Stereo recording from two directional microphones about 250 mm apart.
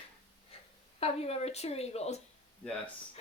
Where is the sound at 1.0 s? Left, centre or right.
Left.